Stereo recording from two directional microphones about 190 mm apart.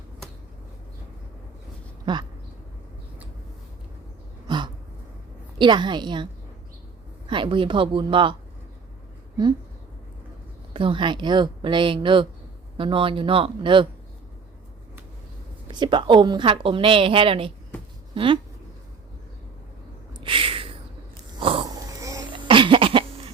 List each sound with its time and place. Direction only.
2.1 s speech: 25° right (ahead or behind)
4.4 s a sound: 25° right (ahead or behind)
5.5 s speech: 25° right (ahead or behind)
7.3 s speech: 25° right (ahead or behind)
10.8 s speech: 25° right (ahead or behind)
15.6 s speech: 25° right (ahead or behind)
20.1 s a sound: 25° right (ahead or behind)
21.3 s cough: 25° right (ahead or behind)